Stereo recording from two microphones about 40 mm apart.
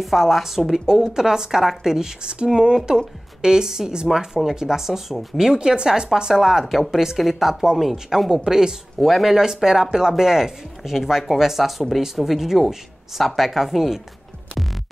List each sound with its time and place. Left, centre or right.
0.0 s speech: centre
9.0 s speech: centre